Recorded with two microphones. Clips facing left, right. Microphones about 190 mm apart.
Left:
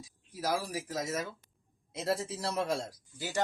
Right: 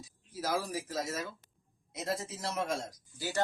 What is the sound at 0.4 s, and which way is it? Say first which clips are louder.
Speech: left 1 dB; 15° left (ahead or behind).